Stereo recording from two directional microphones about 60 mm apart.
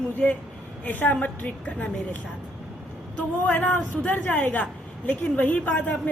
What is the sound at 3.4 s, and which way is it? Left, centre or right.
A woman's voice, left.